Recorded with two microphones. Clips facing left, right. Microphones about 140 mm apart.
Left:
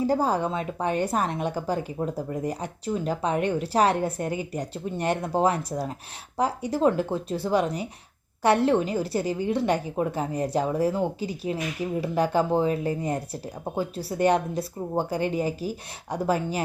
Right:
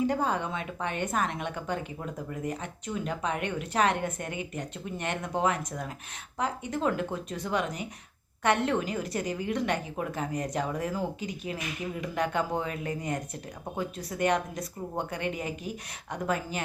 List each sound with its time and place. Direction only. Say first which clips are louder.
0.0 s a woman's voice: left 4 dB; 35° left (ahead or behind)